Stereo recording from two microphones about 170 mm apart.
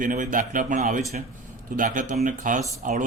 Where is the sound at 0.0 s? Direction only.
50° right (ahead or behind).